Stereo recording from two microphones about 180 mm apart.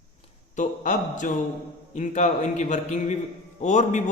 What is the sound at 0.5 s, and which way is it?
Mantra, 45° left (ahead or behind).